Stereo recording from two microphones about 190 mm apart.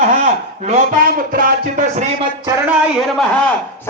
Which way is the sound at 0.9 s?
50° right (ahead or behind).